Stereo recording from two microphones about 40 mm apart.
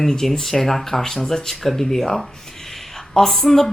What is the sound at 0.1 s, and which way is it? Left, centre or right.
Speech, centre.